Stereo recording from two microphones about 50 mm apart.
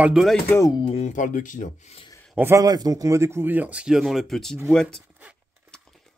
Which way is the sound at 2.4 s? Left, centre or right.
Right.